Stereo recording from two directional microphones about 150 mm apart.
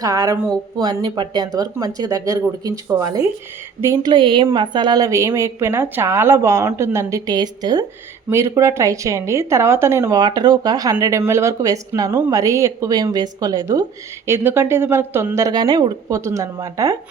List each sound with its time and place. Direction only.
0.0 s a woman's voice: 25° right (ahead or behind)
4.1 s a woman's voice: 30° right (ahead or behind)
14.3 s a woman's voice: 15° right (ahead or behind)